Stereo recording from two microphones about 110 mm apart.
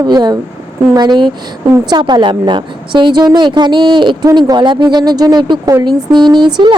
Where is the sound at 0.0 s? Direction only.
40° right (ahead or behind).